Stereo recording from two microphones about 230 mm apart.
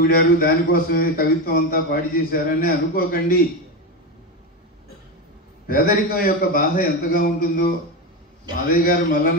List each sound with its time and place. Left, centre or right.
0.0 s speech: left
5.7 s speech: left
8.7 s speech: left